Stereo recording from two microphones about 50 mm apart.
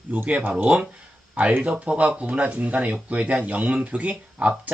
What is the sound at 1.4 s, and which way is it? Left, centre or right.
Speech, right.